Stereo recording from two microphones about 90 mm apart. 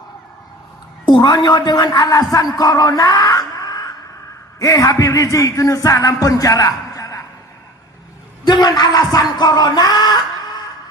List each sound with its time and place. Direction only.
1.0 s a man's voice: 55° left (ahead or behind)
4.6 s music: 40° left (ahead or behind)
8.4 s speech: 50° left (ahead or behind)